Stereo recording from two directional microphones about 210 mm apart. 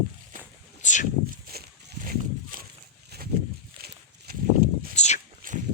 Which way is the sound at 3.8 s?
50° right (ahead or behind).